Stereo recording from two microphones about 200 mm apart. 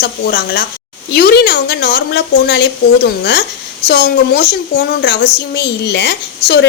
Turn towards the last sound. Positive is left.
turn(degrees=60)  # may be behind; listen again after turning